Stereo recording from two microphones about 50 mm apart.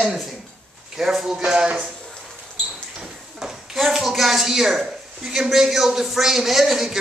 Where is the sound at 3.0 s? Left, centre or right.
Centre.